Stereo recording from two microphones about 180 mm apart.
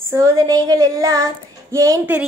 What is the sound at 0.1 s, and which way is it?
A woman's voice, 20° right (ahead or behind).